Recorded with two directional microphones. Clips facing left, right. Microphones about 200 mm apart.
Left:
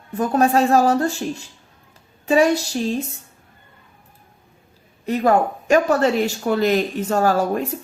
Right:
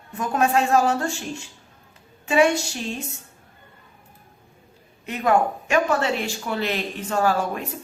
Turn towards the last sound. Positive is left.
turn(degrees=40)  # may be behind; listen again after turning